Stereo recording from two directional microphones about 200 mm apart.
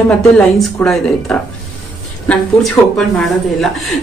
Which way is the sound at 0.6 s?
5° left (ahead or behind).